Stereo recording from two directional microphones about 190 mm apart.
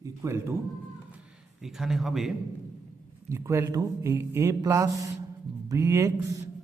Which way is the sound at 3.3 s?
15° right (ahead or behind).